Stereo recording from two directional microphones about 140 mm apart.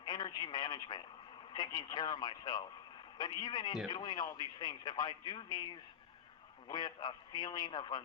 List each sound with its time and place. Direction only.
0.0 s a man's voice: 30° left (ahead or behind)